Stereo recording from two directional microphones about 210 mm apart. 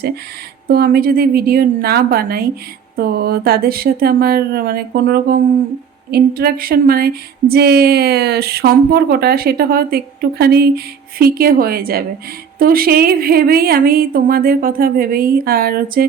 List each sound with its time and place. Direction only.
0.7 s speech: 45° right (ahead or behind)